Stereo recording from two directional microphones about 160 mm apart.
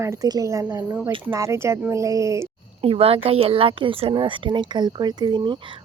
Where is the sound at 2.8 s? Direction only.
35° right (ahead or behind).